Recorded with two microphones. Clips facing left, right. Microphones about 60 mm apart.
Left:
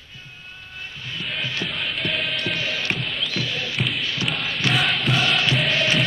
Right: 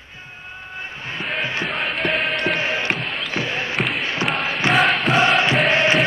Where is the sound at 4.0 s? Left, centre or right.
Right.